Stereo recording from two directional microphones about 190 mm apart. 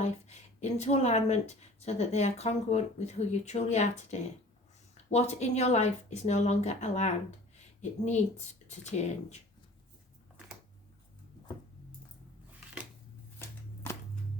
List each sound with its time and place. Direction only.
0.0 s speech: 35° left (ahead or behind)